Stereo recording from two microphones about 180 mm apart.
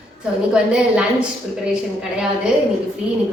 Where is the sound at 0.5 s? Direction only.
5° right (ahead or behind).